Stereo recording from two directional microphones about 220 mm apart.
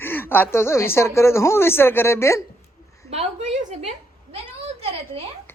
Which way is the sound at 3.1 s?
30° right (ahead or behind).